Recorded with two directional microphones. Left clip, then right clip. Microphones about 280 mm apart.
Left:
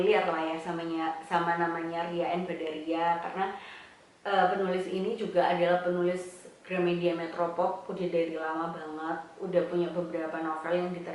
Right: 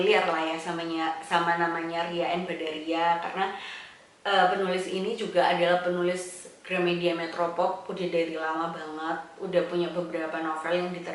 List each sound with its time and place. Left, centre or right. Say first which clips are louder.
0.0 s a woman's voice: right 3 dB; centre
7.5 s speech: right 2 dB; centre
7.9 s a woman's voice: right 2 dB; centre